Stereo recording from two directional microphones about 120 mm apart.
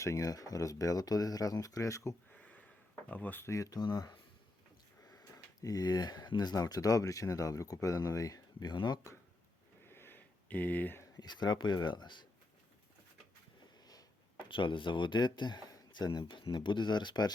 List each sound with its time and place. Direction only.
0.0 s speech: 30° left (ahead or behind)
2.3 s a sound: 10° left (ahead or behind)
3.1 s speech: 15° left (ahead or behind); by 9.0 s 40° left (ahead or behind)
9.8 s a sound: 20° left (ahead or behind)
11.2 s speech: 35° left (ahead or behind)
14.4 s speech: 45° left (ahead or behind)